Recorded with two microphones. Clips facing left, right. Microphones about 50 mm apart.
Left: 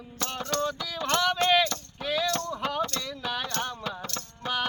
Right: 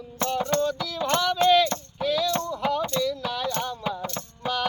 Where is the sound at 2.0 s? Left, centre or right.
Left.